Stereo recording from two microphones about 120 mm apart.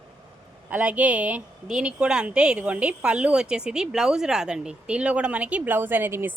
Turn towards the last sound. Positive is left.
turn(degrees=-20)  # may be behind; listen again after turning